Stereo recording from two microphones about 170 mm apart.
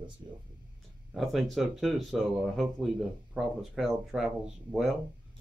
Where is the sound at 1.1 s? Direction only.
Centre (ahead or behind).